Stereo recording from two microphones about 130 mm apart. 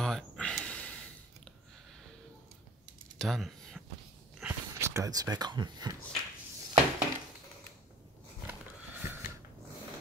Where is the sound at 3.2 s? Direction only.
5° left (ahead or behind).